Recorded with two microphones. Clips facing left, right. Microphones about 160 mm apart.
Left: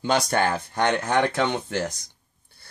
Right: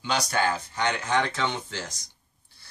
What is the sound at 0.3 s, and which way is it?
Speech, 50° left (ahead or behind).